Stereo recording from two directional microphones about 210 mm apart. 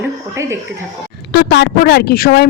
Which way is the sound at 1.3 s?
55° left (ahead or behind).